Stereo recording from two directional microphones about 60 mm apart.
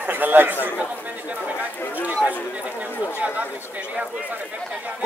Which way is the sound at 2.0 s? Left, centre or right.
Right.